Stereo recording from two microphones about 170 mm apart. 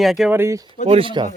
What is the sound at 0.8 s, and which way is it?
Speech, 35° right (ahead or behind).